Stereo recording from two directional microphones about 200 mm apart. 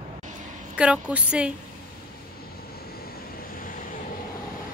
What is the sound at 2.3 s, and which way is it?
Vehicle, 50° left (ahead or behind).